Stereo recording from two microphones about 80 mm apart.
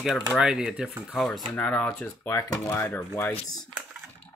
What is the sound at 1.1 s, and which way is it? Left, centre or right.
Speech, centre.